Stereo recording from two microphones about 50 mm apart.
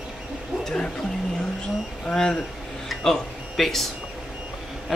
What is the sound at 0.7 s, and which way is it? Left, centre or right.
Speech, centre.